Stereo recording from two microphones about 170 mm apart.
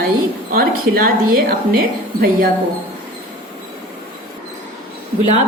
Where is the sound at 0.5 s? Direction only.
60° right (ahead or behind).